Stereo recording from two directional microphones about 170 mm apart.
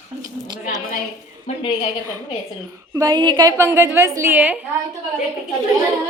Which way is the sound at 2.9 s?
25° right (ahead or behind).